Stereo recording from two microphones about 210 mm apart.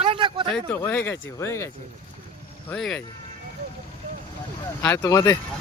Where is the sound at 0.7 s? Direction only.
10° left (ahead or behind).